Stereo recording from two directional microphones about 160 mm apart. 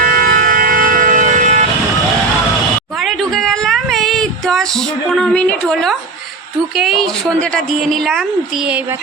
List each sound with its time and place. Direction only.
0.0 s vehicle: 60° right (ahead or behind)
3.0 s a sound: centre (ahead or behind)
6.7 s a woman's voice: centre (ahead or behind)